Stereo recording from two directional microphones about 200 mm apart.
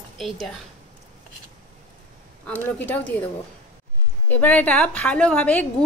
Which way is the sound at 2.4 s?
5° left (ahead or behind).